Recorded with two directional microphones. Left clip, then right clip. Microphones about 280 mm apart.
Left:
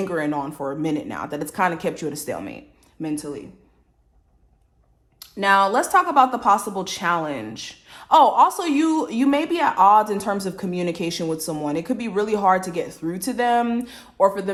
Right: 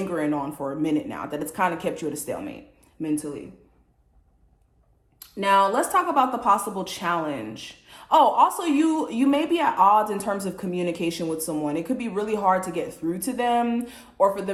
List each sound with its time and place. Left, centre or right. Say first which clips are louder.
0.0 s a woman's voice: left 2 dB; left
5.4 s a woman's voice: left 2 dB; left